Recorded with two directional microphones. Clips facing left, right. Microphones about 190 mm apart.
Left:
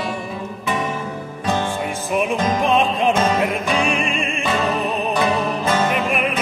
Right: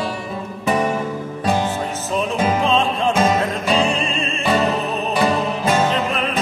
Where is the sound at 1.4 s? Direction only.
10° right (ahead or behind).